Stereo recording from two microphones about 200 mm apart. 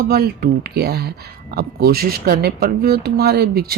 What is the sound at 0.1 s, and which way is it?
A woman's voice, 50° right (ahead or behind).